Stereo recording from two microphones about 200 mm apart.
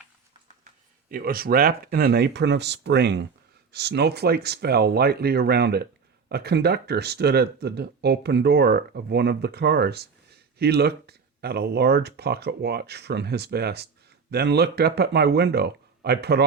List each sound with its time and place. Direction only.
1.1 s speech: 50° right (ahead or behind)